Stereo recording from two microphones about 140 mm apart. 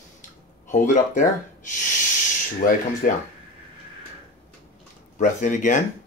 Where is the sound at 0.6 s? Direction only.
65° left (ahead or behind).